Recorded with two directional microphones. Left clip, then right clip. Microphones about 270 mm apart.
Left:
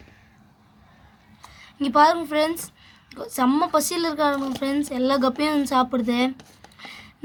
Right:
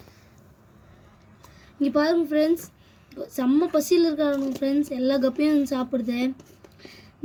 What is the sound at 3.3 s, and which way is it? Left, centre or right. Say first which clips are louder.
Speech: left 2 dB; left.